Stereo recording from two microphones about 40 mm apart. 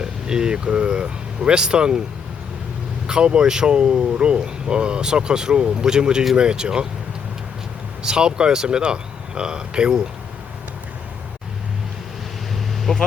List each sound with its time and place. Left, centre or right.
0.0 s speech: centre
3.1 s speech: right
8.0 s speech: centre
12.9 s vehicle: centre